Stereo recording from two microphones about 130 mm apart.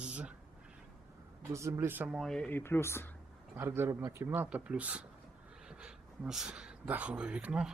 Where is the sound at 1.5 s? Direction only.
25° right (ahead or behind).